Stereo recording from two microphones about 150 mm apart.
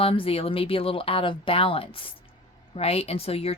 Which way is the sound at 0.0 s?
40° left (ahead or behind).